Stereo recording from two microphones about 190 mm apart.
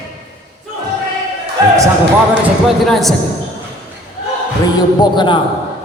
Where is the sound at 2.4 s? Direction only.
Centre (ahead or behind).